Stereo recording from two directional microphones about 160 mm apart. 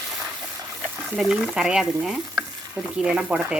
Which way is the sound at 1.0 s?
5° right (ahead or behind).